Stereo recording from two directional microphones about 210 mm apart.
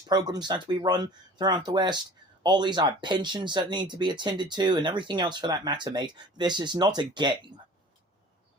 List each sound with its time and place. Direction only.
0.1 s speech: 20° right (ahead or behind)